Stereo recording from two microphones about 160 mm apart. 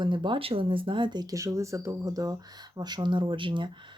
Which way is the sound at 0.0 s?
30° right (ahead or behind).